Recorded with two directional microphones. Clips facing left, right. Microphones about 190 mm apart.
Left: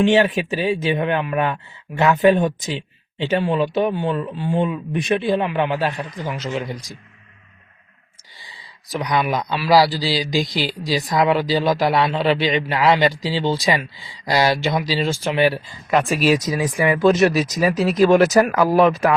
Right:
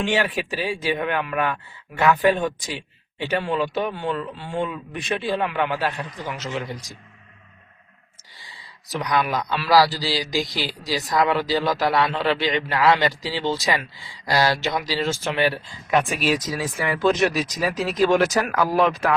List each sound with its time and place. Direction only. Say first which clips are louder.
0.0 s speech: left 7 dB; 20° left (ahead or behind)
8.9 s speech: left 2 dB; 15° left (ahead or behind)
15.9 s speech: left 3 dB; centre (ahead or behind)
16.3 s speech: left 5 dB; 10° left (ahead or behind)
17.2 s speech: left 5 dB; 5° left (ahead or behind)
18.5 s speech: left 5 dB; 10° left (ahead or behind)